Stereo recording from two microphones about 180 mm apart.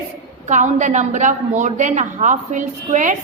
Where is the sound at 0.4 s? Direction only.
40° right (ahead or behind).